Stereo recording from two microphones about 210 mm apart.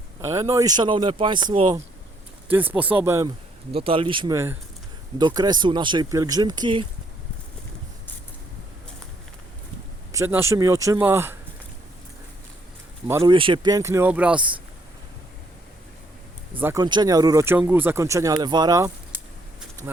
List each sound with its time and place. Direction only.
0.2 s speech: 15° right (ahead or behind)
2.5 s speech: 10° right (ahead or behind)
3.8 s speech: 25° right (ahead or behind)
10.1 s speech: 15° right (ahead or behind)
13.1 s speech: 15° right (ahead or behind)
13.3 s speech: 25° right (ahead or behind); by 14.4 s 5° right (ahead or behind)
16.6 s speech: 10° right (ahead or behind)